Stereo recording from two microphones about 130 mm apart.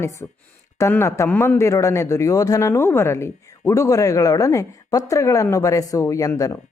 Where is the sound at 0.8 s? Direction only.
20° left (ahead or behind).